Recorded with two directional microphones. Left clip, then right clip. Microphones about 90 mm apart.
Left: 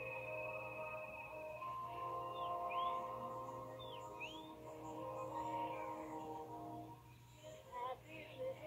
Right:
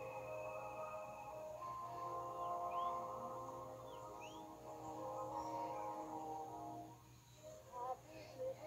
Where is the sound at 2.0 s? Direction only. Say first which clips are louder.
Even; centre (ahead or behind).